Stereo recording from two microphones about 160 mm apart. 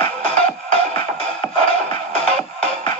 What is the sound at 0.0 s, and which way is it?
Music, 35° left (ahead or behind).